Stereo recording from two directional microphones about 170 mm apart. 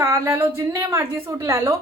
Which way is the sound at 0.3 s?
15° right (ahead or behind).